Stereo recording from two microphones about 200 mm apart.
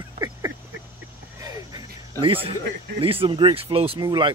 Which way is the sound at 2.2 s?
25° right (ahead or behind).